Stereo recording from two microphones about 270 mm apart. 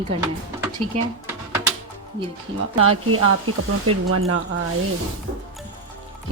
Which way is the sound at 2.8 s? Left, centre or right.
Right.